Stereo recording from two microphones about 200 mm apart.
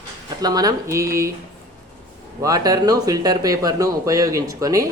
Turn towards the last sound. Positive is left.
turn(degrees=-15)  # may be behind; listen again after turning